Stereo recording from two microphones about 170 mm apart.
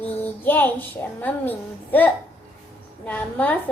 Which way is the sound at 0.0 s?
10° left (ahead or behind).